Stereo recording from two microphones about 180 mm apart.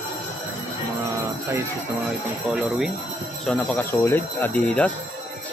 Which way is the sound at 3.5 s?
10° left (ahead or behind).